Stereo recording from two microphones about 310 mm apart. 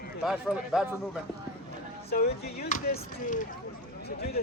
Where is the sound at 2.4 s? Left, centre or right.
Left.